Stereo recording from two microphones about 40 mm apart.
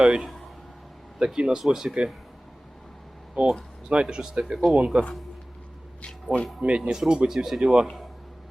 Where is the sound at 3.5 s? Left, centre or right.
Right.